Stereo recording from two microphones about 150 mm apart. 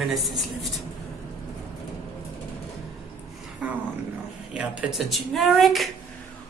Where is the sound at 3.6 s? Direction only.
5° right (ahead or behind).